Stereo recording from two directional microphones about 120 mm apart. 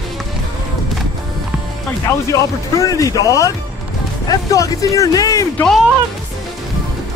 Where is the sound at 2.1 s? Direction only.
25° left (ahead or behind).